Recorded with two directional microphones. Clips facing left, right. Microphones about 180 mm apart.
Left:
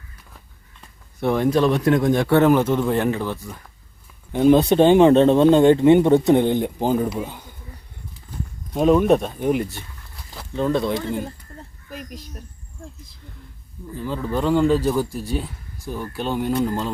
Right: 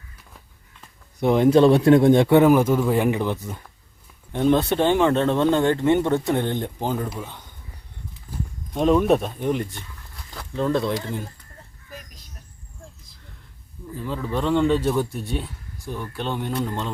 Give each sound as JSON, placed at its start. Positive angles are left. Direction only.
{"t": 1.2, "sound": "speech", "side_deg": -20}
{"t": 2.4, "sound": "speech", "side_deg": -10}
{"t": 4.3, "sound": "speech", "side_deg": 5}
{"t": 4.7, "sound": "speech", "side_deg": 15}
{"t": 8.7, "sound": "speech", "side_deg": 5}
{"t": 13.9, "sound": "speech", "side_deg": 0}